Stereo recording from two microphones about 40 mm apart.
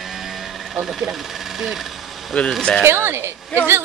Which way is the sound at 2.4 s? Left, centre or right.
Left.